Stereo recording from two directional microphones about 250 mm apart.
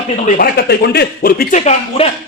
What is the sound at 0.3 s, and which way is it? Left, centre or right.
A man's voice, left.